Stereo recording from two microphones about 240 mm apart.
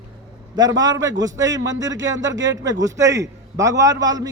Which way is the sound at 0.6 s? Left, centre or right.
Centre.